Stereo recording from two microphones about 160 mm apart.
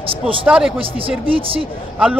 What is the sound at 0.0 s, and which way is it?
Speech, 35° right (ahead or behind).